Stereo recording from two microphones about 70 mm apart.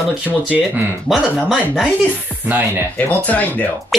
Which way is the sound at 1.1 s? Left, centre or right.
Centre.